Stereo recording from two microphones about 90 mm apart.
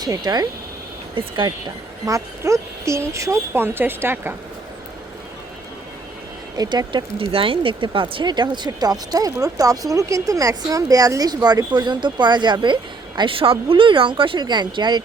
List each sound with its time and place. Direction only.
0.0 s speech: 50° right (ahead or behind)
1.2 s speech: 75° right (ahead or behind)
2.0 s speech: 35° right (ahead or behind)
6.6 s speech: 55° right (ahead or behind)